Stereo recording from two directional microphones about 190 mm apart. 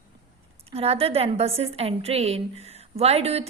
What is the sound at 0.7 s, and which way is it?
A woman's voice, 30° right (ahead or behind).